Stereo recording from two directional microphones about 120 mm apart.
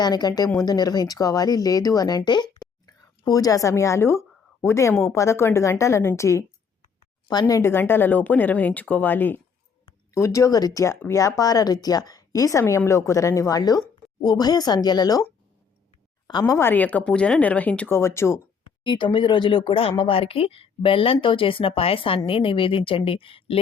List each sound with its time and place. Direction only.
0.0 s speech: 35° left (ahead or behind)
16.6 s speech: 15° left (ahead or behind)
18.8 s speech: 40° left (ahead or behind)